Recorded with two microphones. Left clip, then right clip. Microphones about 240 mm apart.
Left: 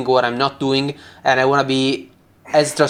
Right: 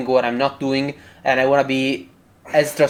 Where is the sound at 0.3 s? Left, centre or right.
Centre.